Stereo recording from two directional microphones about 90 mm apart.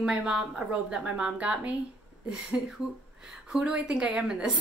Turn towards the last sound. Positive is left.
turn(degrees=-10)  # may be behind; listen again after turning